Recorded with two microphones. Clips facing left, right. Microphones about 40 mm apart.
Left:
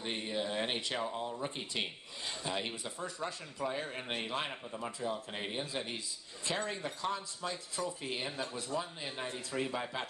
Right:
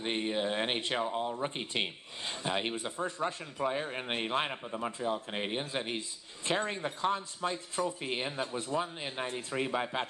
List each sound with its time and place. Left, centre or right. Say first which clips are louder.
0.0 s a man's voice: right 5 dB; right